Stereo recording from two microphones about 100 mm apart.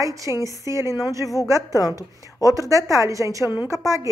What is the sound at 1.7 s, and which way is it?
Speech, 35° left (ahead or behind).